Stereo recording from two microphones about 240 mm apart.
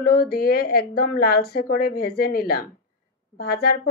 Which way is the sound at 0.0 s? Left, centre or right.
Left.